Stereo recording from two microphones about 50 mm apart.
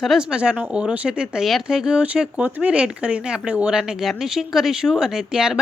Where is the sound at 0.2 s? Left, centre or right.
Centre.